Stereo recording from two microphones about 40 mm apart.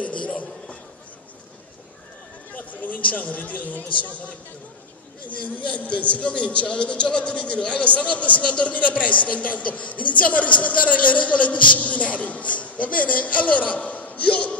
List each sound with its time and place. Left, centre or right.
0.0 s a sound: left
2.5 s speech: left
5.9 s a man's voice: left